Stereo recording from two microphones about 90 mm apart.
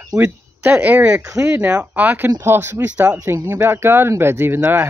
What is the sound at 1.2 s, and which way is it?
A man's voice, 35° right (ahead or behind).